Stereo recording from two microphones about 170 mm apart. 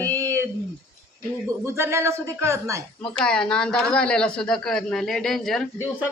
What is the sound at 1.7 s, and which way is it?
Speech, 15° right (ahead or behind).